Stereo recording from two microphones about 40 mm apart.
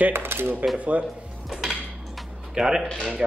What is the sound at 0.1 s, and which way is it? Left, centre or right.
Cutlery, right.